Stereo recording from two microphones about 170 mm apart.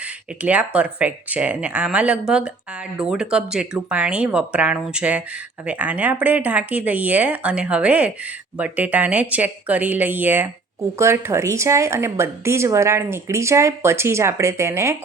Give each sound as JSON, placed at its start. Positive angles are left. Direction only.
{"t": 0.4, "sound": "speech", "side_deg": -10}